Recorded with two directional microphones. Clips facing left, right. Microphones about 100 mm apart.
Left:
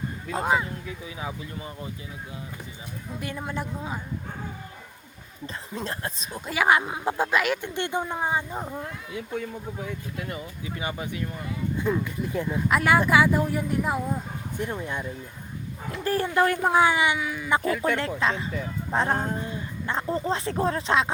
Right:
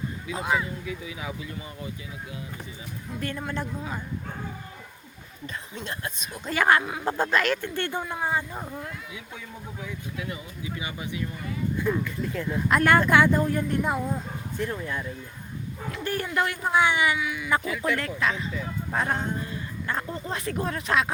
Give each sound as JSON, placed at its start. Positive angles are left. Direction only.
{"t": 0.3, "sound": "speech", "side_deg": 40}
{"t": 3.2, "sound": "speech", "side_deg": 10}
{"t": 5.5, "sound": "speech", "side_deg": 35}
{"t": 6.4, "sound": "speech", "side_deg": 5}
{"t": 9.1, "sound": "speech", "side_deg": 50}
{"t": 11.8, "sound": "speech", "side_deg": 20}
{"t": 12.5, "sound": "speech", "side_deg": 0}
{"t": 14.6, "sound": "speech", "side_deg": 20}
{"t": 17.8, "sound": "speech", "side_deg": 30}
{"t": 19.4, "sound": "speech", "side_deg": 25}